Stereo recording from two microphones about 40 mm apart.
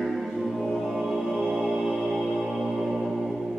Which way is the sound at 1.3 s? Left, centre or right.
Centre.